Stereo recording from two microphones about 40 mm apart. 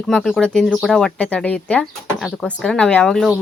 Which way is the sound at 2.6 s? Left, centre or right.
Centre.